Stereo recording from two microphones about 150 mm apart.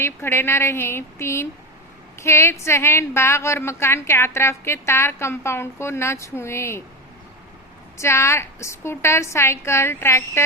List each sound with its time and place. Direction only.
0.0 s a woman's voice: 15° left (ahead or behind)
7.9 s a woman's voice: 20° left (ahead or behind)